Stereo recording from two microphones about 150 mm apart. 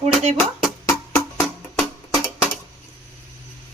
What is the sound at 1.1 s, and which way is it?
Music, centre (ahead or behind).